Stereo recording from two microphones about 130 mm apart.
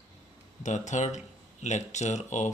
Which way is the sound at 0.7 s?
65° left (ahead or behind).